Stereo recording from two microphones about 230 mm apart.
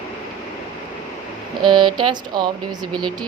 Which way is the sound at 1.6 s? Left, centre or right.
Centre.